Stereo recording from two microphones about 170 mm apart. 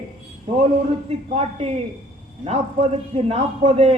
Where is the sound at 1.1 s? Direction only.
35° right (ahead or behind).